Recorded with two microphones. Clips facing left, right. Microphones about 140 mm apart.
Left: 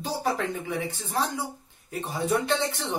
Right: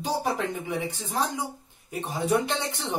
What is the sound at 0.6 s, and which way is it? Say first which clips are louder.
Speech: right 1 dB; 15° right (ahead or behind).